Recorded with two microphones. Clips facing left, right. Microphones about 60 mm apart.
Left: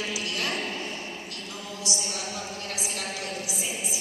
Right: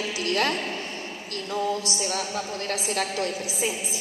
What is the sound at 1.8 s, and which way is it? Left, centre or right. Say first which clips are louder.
A woman's voice: right 5 dB; right.